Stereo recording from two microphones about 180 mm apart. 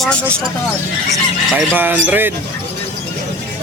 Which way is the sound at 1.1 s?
5° right (ahead or behind).